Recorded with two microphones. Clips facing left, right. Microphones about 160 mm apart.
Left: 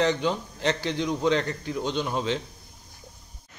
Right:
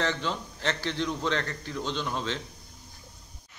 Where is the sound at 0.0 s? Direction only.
15° left (ahead or behind).